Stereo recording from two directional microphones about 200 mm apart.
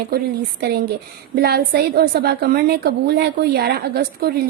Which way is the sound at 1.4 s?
50° right (ahead or behind).